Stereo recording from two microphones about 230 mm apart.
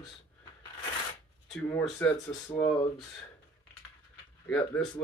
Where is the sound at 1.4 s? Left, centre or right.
Centre.